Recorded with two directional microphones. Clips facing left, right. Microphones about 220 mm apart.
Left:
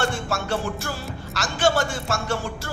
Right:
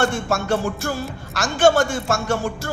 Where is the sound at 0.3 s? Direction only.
50° right (ahead or behind).